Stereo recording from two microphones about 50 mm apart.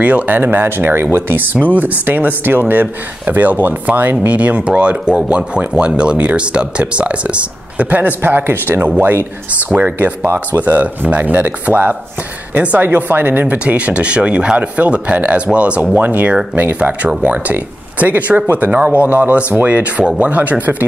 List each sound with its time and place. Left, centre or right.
0.0 s speech: right
0.4 s speech: right
4.3 s speech: right
8.8 s speech: right
9.9 s speech: right
15.9 s speech: right